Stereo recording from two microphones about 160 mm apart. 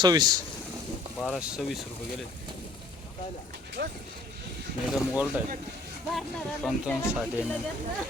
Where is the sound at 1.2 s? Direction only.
5° right (ahead or behind).